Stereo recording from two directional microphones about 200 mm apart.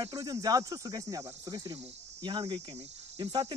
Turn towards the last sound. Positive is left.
turn(degrees=-25)  # may be behind; listen again after turning